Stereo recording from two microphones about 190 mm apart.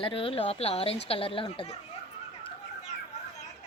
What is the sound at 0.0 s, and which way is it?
Speech, 30° left (ahead or behind).